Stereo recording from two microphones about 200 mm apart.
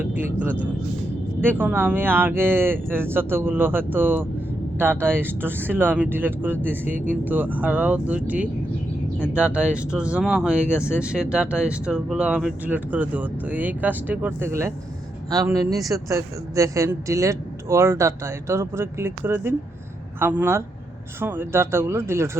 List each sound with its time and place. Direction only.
0.1 s speech: 10° right (ahead or behind)